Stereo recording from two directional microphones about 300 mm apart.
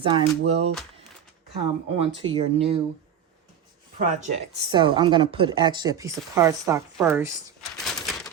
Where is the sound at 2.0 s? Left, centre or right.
Centre.